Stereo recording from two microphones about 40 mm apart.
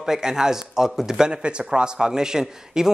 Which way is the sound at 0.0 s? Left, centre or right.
Centre.